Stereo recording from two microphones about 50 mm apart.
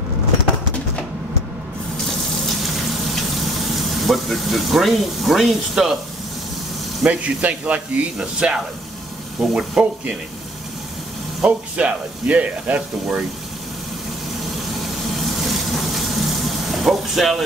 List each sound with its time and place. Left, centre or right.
2.6 s frying: centre
7.1 s speech: right
11.4 s speech: right
14.8 s a sound: centre
16.7 s speech: centre